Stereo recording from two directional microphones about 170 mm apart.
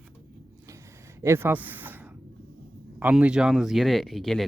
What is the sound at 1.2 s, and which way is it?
Speech, 15° right (ahead or behind).